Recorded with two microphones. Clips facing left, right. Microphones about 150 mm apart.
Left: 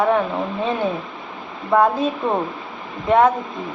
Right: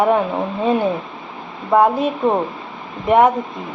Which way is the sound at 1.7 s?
15° right (ahead or behind).